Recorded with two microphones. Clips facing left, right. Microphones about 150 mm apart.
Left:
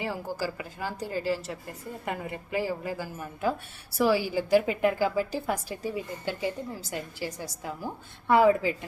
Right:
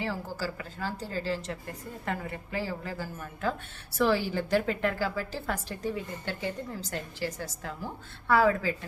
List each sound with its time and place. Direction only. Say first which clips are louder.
0.0 s a woman's voice: left 2 dB; 15° left (ahead or behind)